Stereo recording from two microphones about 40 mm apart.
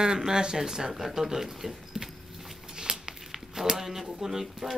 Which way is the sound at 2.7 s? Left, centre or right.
Centre.